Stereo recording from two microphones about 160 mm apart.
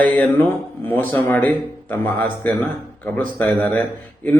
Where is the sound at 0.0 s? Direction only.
10° left (ahead or behind).